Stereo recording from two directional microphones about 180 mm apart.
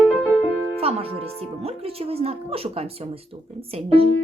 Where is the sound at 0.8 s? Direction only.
35° right (ahead or behind).